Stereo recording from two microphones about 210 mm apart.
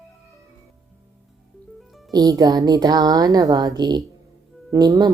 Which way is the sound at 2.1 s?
15° right (ahead or behind).